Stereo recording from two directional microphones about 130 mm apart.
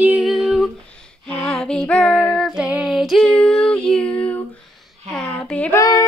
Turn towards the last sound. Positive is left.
turn(degrees=30)  # may be behind; listen again after turning